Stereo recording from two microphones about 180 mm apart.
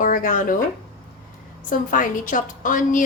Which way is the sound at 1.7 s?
50° left (ahead or behind).